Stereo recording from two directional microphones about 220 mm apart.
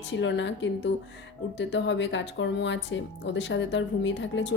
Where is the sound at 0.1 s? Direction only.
55° left (ahead or behind).